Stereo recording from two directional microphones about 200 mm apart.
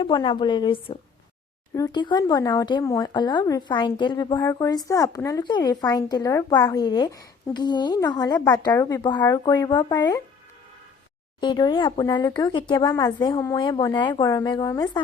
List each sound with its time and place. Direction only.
0.0 s speech: 25° left (ahead or behind)
11.3 s speech: 20° left (ahead or behind)